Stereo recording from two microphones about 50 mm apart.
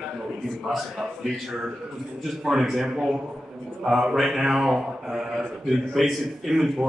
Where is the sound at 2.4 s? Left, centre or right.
Centre.